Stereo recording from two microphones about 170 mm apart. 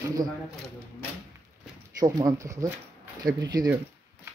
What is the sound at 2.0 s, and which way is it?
Speech, 20° right (ahead or behind).